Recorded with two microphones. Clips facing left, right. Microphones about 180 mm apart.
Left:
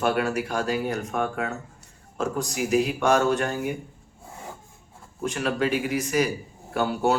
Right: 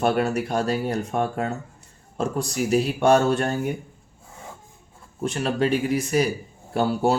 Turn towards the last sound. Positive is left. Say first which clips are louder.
# right 2 dB
turn(degrees=-30)  # may be behind; listen again after turning